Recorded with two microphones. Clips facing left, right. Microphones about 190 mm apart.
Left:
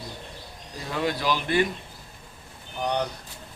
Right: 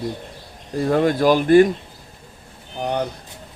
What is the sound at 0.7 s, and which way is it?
Speech, 50° right (ahead or behind).